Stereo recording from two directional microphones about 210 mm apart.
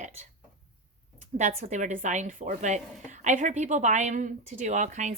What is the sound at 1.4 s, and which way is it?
A woman's voice, 35° right (ahead or behind).